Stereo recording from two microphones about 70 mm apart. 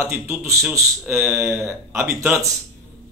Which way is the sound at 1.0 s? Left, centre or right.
Right.